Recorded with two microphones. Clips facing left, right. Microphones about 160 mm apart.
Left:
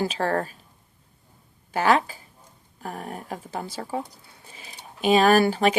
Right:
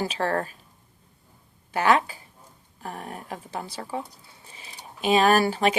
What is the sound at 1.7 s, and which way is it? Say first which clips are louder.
Speech: even; 40° left (ahead or behind).